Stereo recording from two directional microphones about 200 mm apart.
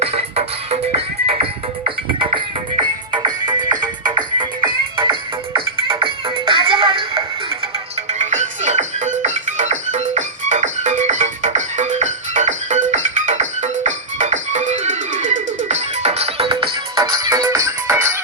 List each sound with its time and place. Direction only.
0.0 s music: 30° right (ahead or behind)
8.2 s music: 35° right (ahead or behind); by 18.2 s 15° right (ahead or behind)